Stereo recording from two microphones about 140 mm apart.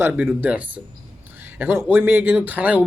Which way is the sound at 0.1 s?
15° right (ahead or behind).